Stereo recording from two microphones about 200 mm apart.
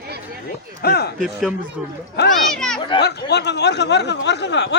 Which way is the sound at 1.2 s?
Centre (ahead or behind).